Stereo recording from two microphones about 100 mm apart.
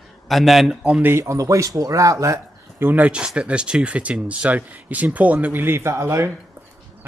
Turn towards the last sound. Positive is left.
turn(degrees=-25)  # may be behind; listen again after turning